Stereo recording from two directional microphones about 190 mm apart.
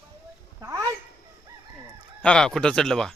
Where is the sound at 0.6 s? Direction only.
15° right (ahead or behind).